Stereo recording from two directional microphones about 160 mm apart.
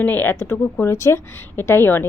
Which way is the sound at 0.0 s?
10° left (ahead or behind).